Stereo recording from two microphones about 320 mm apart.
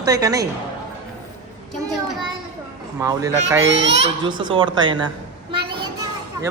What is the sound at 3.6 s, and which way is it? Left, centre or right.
Speech, right.